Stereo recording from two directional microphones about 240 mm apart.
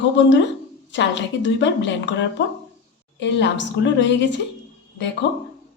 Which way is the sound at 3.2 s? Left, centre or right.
Left.